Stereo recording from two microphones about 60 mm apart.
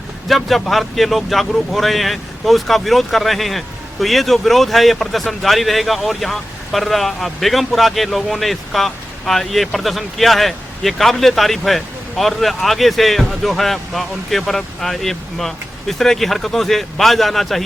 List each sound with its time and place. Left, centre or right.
0.3 s speech: centre